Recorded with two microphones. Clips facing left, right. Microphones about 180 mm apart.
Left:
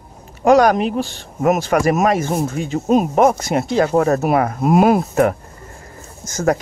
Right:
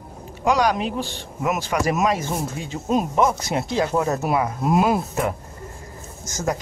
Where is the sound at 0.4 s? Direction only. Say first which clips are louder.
Left 8 dB; 50° left (ahead or behind).